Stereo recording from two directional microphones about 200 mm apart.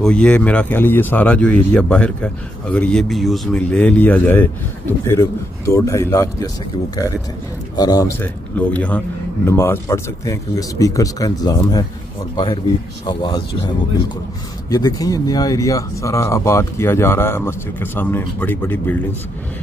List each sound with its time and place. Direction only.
0.0 s speech: 5° left (ahead or behind)
7.7 s speech: 20° left (ahead or behind)
13.0 s speech: 25° left (ahead or behind)
14.7 s speech: 20° left (ahead or behind)